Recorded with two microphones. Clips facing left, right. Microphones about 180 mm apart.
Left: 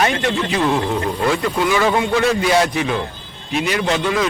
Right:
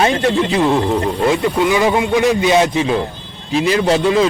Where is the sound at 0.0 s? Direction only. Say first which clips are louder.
Right 4 dB; 25° right (ahead or behind).